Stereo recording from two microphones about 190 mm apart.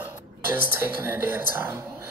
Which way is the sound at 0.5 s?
10° right (ahead or behind).